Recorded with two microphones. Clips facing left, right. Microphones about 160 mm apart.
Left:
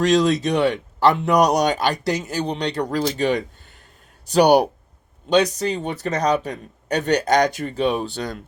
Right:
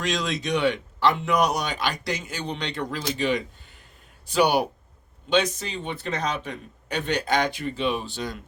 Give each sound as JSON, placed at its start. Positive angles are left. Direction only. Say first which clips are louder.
{"t": 0.0, "sound": "speech", "louder": "left 10 dB", "side_deg": 35}